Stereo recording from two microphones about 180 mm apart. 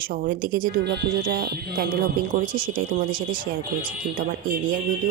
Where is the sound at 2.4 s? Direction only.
50° right (ahead or behind).